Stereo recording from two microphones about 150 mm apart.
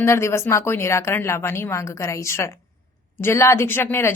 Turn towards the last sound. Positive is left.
turn(degrees=15)  # may be behind; listen again after turning